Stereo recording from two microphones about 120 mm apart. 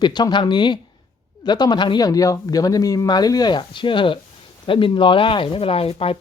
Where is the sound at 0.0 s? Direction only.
35° left (ahead or behind).